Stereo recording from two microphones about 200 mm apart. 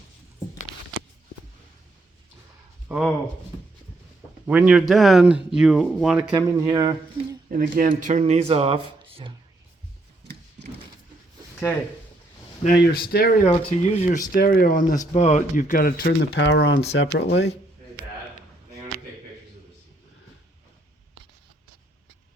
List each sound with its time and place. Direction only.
2.9 s speech: 10° right (ahead or behind)
4.4 s speech: 5° right (ahead or behind)
6.7 s speech: 20° right (ahead or behind)
7.5 s speech: 40° right (ahead or behind)
12.6 s speech: 50° left (ahead or behind)
13.4 s speech: 35° left (ahead or behind)
14.3 s speech: 45° left (ahead or behind)